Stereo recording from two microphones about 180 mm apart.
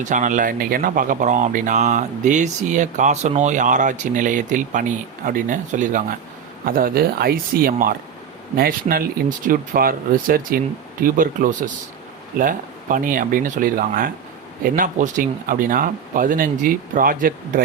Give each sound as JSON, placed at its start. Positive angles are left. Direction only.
{"t": 0.0, "sound": "speech", "side_deg": -45}